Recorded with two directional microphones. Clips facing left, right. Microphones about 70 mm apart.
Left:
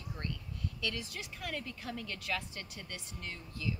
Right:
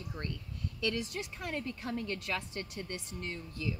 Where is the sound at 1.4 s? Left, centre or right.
Right.